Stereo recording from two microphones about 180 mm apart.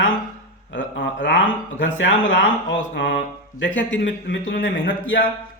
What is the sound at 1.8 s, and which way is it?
Speech, 90° left.